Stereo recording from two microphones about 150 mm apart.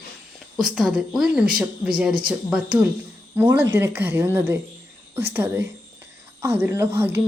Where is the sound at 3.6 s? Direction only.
15° right (ahead or behind).